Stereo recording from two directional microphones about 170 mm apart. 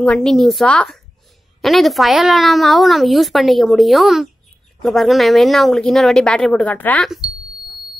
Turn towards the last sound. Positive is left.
turn(degrees=0)  # may be behind; listen again after turning